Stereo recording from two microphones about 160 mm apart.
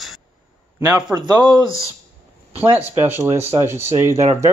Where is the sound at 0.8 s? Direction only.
25° right (ahead or behind).